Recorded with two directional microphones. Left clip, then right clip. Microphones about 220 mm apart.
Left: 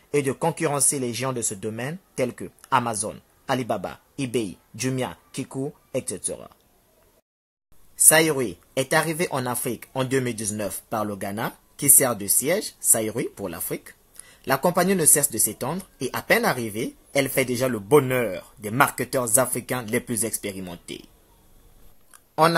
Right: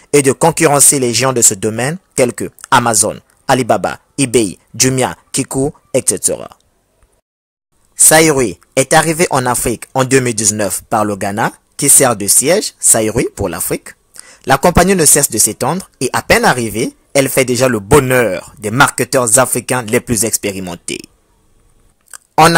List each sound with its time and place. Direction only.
0.1 s speech: 40° right (ahead or behind)
8.1 s speech: 35° right (ahead or behind)
22.1 s chewing: 40° right (ahead or behind)